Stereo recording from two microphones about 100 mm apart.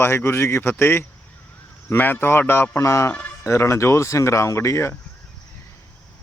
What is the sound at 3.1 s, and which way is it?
Speech, 15° left (ahead or behind).